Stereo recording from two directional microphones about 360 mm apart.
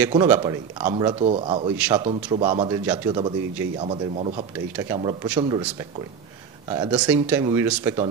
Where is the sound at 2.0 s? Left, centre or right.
Centre.